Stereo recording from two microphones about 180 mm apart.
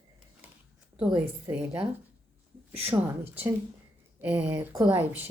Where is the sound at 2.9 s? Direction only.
10° right (ahead or behind).